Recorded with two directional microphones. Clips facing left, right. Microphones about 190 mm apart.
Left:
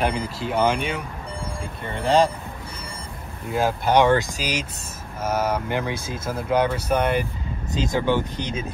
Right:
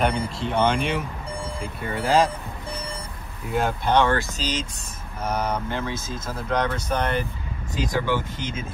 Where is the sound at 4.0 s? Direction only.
15° left (ahead or behind).